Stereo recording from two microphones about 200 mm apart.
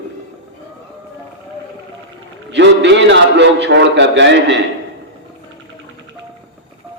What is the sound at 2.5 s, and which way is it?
A man's voice, 60° right (ahead or behind).